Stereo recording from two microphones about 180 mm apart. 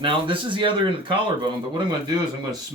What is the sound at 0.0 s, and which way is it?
Speech, 25° right (ahead or behind).